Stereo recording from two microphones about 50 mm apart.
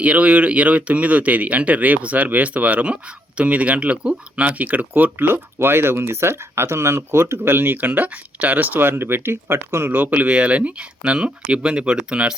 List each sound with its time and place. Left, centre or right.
0.0 s speech: right
5.3 s speech: right
8.9 s speech: right
9.9 s speech: right